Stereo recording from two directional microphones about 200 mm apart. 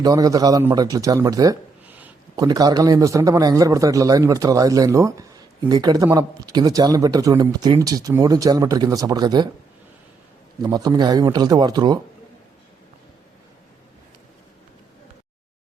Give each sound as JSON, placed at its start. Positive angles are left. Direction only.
{"t": 0.0, "sound": "a man's voice", "side_deg": -20}
{"t": 2.3, "sound": "a man's voice", "side_deg": -20}
{"t": 10.6, "sound": "speech", "side_deg": -20}